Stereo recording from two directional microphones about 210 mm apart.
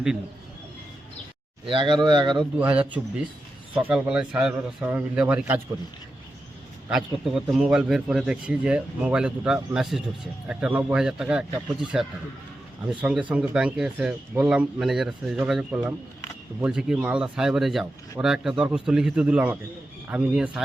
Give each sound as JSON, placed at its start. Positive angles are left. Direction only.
{"t": 1.6, "sound": "speech", "side_deg": -25}
{"t": 2.6, "sound": "a man's voice", "side_deg": -5}
{"t": 6.9, "sound": "speech", "side_deg": 0}